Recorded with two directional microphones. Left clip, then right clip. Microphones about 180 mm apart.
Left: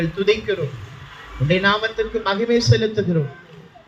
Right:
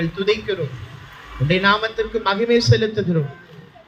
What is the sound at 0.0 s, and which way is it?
A man's voice, 30° right (ahead or behind).